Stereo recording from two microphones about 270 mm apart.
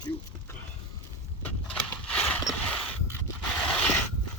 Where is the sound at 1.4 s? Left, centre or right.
Centre.